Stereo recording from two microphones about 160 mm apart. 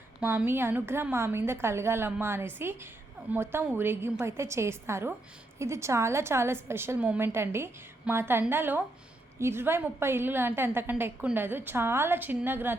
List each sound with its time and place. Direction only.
0.2 s a woman's voice: 10° right (ahead or behind)